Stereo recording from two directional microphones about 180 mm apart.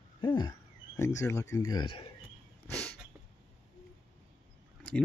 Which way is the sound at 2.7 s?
5° left (ahead or behind).